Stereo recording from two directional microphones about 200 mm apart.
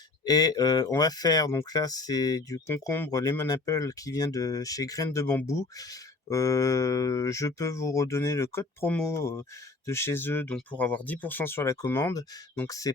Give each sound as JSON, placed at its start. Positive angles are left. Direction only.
{"t": 0.3, "sound": "speech", "side_deg": 20}